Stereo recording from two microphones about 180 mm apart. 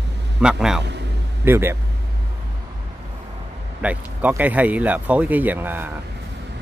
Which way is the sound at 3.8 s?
10° right (ahead or behind).